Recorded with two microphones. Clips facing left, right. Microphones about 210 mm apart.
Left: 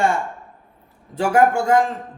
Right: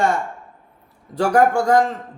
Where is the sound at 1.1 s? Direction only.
5° left (ahead or behind).